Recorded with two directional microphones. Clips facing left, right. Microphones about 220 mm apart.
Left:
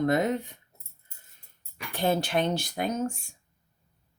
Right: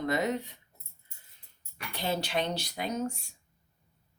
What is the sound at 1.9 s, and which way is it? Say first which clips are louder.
Speech: left 6 dB; 50° left (ahead or behind).